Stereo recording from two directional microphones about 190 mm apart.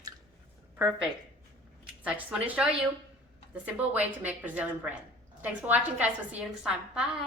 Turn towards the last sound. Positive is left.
turn(degrees=-5)  # may be behind; listen again after turning